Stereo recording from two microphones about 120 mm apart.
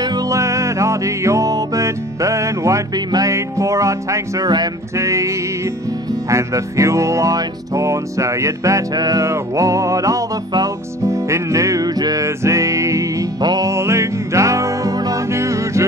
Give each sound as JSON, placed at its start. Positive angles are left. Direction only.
{"t": 0.0, "sound": "music", "side_deg": -30}
{"t": 6.3, "sound": "music", "side_deg": -25}